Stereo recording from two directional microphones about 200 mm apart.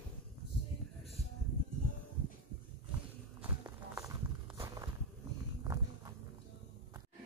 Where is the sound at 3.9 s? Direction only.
15° right (ahead or behind).